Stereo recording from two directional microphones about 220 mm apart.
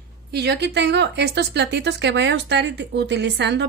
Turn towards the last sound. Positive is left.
turn(degrees=-50)  # may be behind; listen again after turning